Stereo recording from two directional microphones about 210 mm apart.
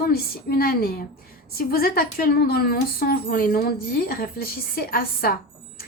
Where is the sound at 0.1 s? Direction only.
45° left (ahead or behind).